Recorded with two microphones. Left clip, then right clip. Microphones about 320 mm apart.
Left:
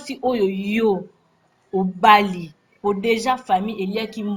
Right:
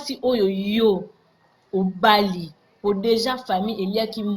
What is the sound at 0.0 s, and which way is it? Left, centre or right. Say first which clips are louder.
Speech: even; left.